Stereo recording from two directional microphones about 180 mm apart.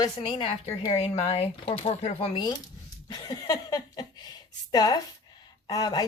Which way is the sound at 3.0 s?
20° left (ahead or behind).